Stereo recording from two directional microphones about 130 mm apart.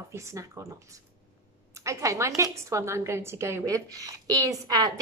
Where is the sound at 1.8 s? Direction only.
25° right (ahead or behind).